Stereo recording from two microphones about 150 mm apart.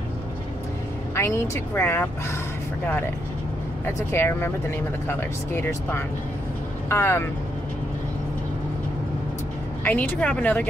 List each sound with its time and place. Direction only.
1.1 s speech: 15° left (ahead or behind)
3.8 s speech: 15° left (ahead or behind)
9.8 s speech: 10° left (ahead or behind)